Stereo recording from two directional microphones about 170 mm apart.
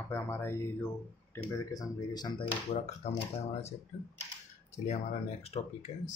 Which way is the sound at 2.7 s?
40° left (ahead or behind).